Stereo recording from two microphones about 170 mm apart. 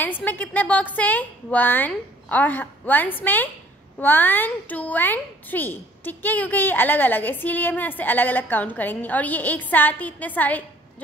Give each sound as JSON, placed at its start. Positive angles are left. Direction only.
{"t": 0.0, "sound": "speech", "side_deg": 10}